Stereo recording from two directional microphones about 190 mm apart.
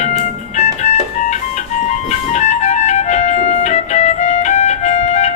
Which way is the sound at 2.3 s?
40° left (ahead or behind).